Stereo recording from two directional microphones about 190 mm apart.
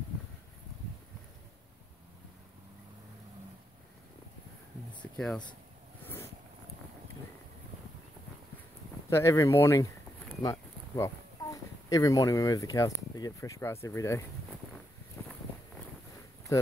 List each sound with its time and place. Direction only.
5.0 s speech: centre (ahead or behind)
9.1 s speech: 15° left (ahead or behind)
15.2 s a sound: 15° left (ahead or behind)